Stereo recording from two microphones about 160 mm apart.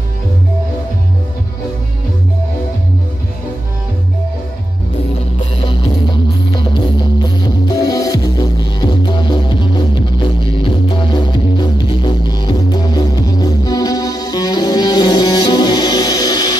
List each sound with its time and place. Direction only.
5.6 s music: 30° left (ahead or behind)